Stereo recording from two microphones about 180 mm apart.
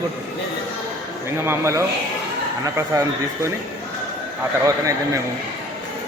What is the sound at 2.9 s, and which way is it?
Speech, 15° right (ahead or behind).